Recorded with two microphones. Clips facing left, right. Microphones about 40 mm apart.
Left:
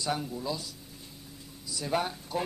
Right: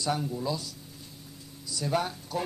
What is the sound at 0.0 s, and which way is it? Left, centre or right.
Speech, centre.